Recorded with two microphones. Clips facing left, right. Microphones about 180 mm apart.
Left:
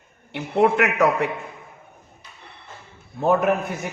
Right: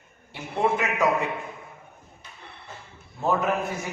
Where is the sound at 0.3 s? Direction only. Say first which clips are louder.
Left 6 dB; 70° left (ahead or behind).